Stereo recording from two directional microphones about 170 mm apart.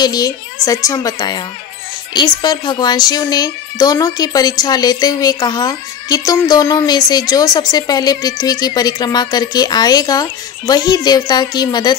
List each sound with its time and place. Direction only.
0.0 s a woman's voice: 20° left (ahead or behind)